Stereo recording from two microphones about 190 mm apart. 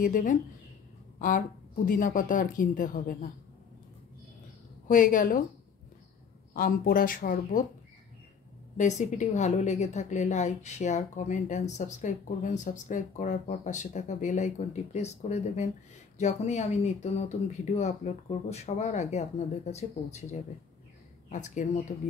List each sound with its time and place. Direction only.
0.0 s speech: 45° left (ahead or behind)
1.9 s speech: 45° left (ahead or behind)
4.8 s speech: 45° left (ahead or behind)
6.5 s speech: 50° left (ahead or behind)
8.7 s a woman's voice: 40° left (ahead or behind)
21.3 s a woman's voice: 40° left (ahead or behind)